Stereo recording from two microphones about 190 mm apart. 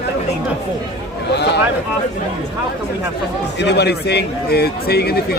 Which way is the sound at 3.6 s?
60° left (ahead or behind).